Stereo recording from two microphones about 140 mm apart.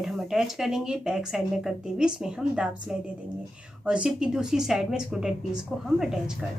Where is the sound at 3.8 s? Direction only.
5° right (ahead or behind).